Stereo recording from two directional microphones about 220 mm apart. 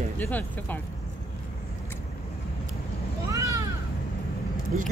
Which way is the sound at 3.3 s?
15° right (ahead or behind).